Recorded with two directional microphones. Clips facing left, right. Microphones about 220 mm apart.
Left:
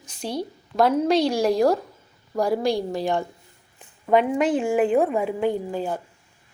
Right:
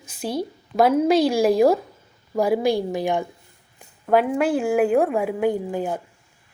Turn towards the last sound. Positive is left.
turn(degrees=-10)  # may be behind; listen again after turning